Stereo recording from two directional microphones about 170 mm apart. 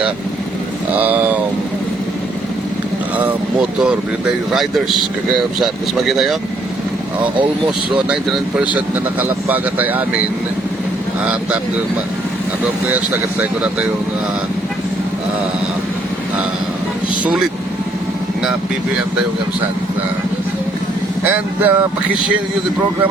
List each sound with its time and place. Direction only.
0.9 s a sound: 10° right (ahead or behind)
3.2 s speech: 5° right (ahead or behind)
8.1 s speech: 5° right (ahead or behind)
13.4 s speech: 5° right (ahead or behind)
21.2 s speech: 10° right (ahead or behind)